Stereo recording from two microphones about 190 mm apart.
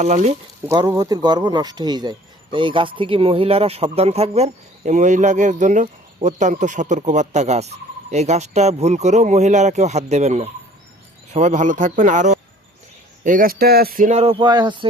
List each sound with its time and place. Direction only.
0.0 s a man's voice: 35° right (ahead or behind)
0.7 s a man's voice: 20° right (ahead or behind)